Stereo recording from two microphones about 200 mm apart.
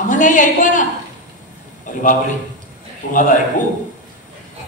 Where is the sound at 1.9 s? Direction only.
40° left (ahead or behind).